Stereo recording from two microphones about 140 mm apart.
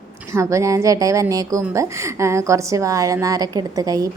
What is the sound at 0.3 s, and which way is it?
A woman's voice, 20° right (ahead or behind).